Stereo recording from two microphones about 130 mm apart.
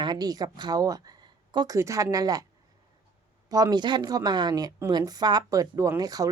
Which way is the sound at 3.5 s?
30° right (ahead or behind).